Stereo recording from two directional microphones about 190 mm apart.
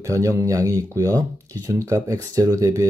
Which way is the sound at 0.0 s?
15° right (ahead or behind).